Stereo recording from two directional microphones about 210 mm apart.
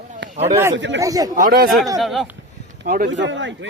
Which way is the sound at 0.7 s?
60° right (ahead or behind).